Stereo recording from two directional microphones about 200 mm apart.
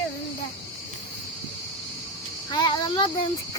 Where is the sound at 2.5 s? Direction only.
20° left (ahead or behind).